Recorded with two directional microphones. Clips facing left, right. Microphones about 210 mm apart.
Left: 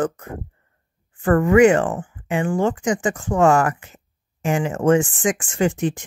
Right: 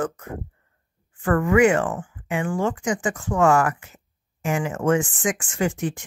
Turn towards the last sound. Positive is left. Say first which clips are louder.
# left 4 dB
turn(degrees=30)  # may be behind; listen again after turning